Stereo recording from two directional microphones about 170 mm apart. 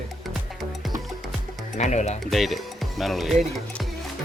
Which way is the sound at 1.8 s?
45° left (ahead or behind).